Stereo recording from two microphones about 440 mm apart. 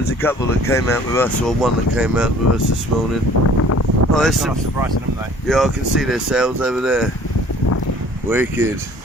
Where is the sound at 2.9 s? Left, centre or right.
Right.